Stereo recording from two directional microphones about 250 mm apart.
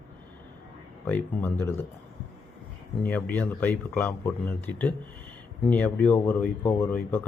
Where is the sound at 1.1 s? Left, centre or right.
Centre.